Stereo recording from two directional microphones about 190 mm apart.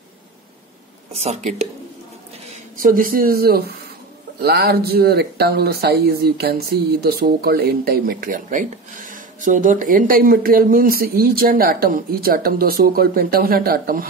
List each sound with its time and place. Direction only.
1.1 s speech: 35° right (ahead or behind)
2.8 s speech: 45° right (ahead or behind)